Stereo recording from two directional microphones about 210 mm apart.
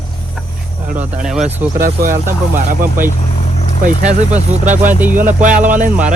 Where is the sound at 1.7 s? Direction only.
45° right (ahead or behind).